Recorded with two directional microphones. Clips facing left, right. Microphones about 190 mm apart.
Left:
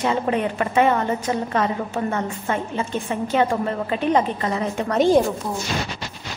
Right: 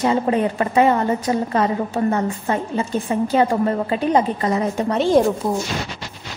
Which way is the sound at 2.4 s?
35° right (ahead or behind).